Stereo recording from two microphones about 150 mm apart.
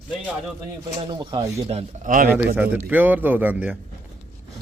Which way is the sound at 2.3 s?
10° right (ahead or behind).